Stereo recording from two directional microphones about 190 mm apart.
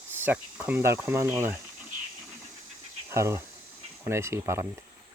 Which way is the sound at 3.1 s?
15° right (ahead or behind).